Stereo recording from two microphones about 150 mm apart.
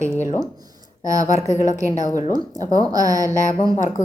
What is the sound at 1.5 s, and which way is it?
Speech, 55° left (ahead or behind).